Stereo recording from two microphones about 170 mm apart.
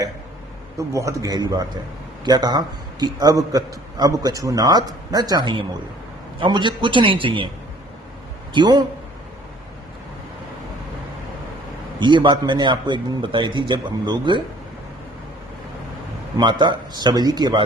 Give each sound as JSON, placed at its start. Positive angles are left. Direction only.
{"t": 0.8, "sound": "a man's voice", "side_deg": -20}
{"t": 8.5, "sound": "a man's voice", "side_deg": -25}
{"t": 11.9, "sound": "a man's voice", "side_deg": -25}
{"t": 16.4, "sound": "a man's voice", "side_deg": -25}